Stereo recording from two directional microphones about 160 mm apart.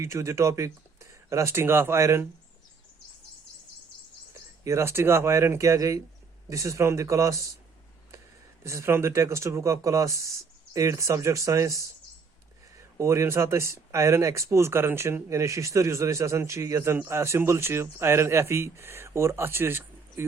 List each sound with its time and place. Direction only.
0.0 s speech: 20° right (ahead or behind)
4.6 s speech: 15° right (ahead or behind)
8.6 s speech: 15° right (ahead or behind)
13.0 s speech: 20° right (ahead or behind)